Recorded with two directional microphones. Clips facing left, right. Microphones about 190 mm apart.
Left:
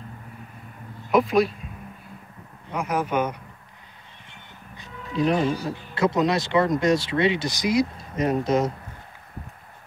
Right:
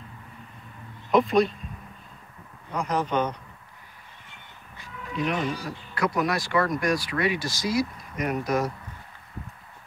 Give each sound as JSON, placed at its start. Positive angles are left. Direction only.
{"t": 1.1, "sound": "speech", "side_deg": 0}
{"t": 2.7, "sound": "speech", "side_deg": 10}
{"t": 5.1, "sound": "speech", "side_deg": 35}